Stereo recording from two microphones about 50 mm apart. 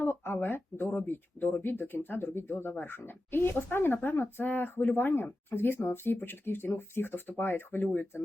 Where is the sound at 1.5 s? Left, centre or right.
Left.